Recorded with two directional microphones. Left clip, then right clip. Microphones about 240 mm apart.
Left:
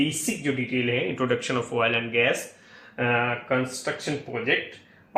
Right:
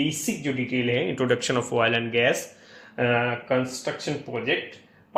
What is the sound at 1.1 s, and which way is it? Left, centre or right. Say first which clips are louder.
Speech: right 2 dB; right.